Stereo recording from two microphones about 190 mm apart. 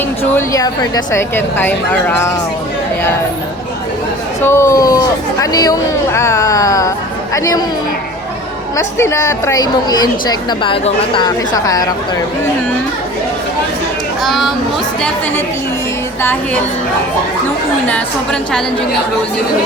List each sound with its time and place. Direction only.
0.3 s speech: 20° left (ahead or behind)
4.4 s speech: 15° left (ahead or behind)
8.7 s a woman's voice: 15° left (ahead or behind)
14.3 s a woman's voice: centre (ahead or behind)
17.8 s a woman's voice: 5° left (ahead or behind)